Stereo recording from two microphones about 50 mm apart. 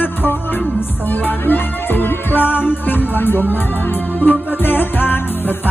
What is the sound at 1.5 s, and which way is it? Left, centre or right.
Music, left.